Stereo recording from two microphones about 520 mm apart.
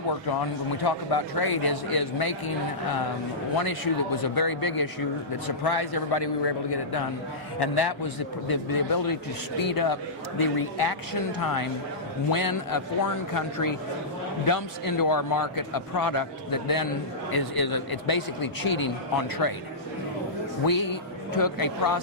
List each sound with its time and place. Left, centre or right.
0.9 s a man's voice: left
4.4 s a man's voice: left
20.7 s a man's voice: left